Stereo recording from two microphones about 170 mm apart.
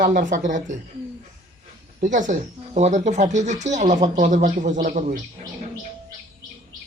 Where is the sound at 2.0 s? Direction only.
45° right (ahead or behind).